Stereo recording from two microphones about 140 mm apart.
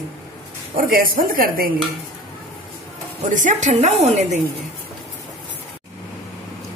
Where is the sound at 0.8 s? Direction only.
85° right.